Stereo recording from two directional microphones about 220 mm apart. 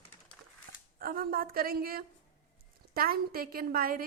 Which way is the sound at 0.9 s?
40° right (ahead or behind).